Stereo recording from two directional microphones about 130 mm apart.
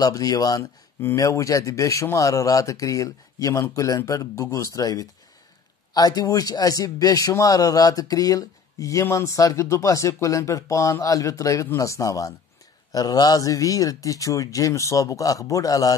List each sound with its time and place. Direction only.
0.0 s speech: 30° left (ahead or behind)